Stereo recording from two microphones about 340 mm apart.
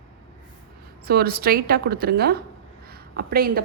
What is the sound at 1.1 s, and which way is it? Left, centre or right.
A woman's voice, right.